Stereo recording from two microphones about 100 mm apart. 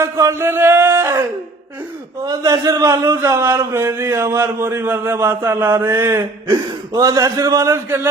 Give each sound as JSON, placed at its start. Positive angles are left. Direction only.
{"t": 0.0, "sound": "speech", "side_deg": -30}
{"t": 2.2, "sound": "a man's voice", "side_deg": -35}
{"t": 3.2, "sound": "speech", "side_deg": -25}
{"t": 6.9, "sound": "a man's voice", "side_deg": -40}